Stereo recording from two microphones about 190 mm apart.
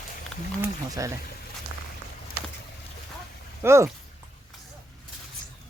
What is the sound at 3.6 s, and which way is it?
Speech, 15° right (ahead or behind).